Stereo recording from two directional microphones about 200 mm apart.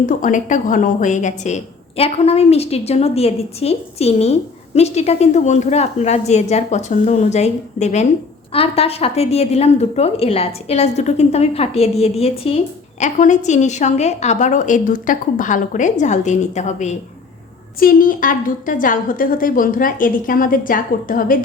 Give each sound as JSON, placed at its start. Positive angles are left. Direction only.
{"t": 0.0, "sound": "a woman's voice", "side_deg": 40}